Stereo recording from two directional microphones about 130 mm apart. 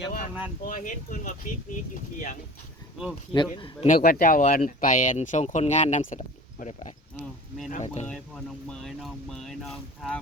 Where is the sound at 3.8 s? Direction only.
85° left; by 6.9 s 70° left (ahead or behind).